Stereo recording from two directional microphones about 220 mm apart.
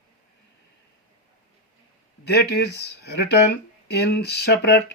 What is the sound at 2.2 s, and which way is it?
Speech, 50° left (ahead or behind).